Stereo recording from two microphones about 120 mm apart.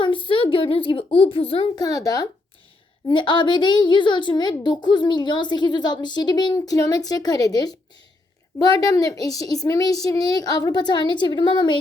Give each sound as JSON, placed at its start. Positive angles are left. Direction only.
{"t": 0.0, "sound": "a child's voice", "side_deg": 45}
{"t": 1.7, "sound": "a child's voice", "side_deg": 30}
{"t": 3.1, "sound": "a child's voice", "side_deg": 40}